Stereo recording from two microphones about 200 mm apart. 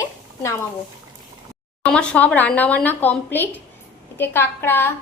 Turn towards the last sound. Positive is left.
turn(degrees=10)  # may be behind; listen again after turning